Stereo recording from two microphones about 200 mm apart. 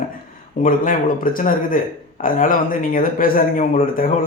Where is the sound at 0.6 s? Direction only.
40° left (ahead or behind).